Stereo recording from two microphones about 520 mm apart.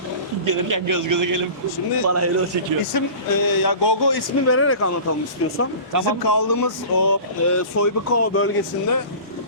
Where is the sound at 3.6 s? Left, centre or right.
Left.